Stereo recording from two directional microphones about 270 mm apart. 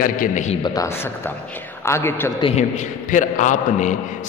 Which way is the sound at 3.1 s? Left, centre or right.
Left.